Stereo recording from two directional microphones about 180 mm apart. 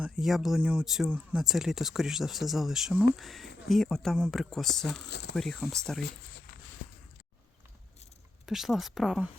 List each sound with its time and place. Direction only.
0.0 s speech: centre (ahead or behind)
4.9 s speech: 70° left (ahead or behind)
5.3 s speech: centre (ahead or behind)
8.4 s speech: centre (ahead or behind)